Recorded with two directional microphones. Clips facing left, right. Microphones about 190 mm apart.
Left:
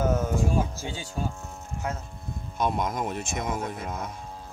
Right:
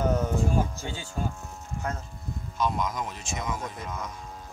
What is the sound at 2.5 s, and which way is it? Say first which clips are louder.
Speech: left 1 dB; 55° left (ahead or behind).